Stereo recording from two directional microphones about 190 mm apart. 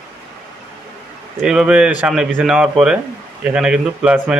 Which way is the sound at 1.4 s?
5° right (ahead or behind).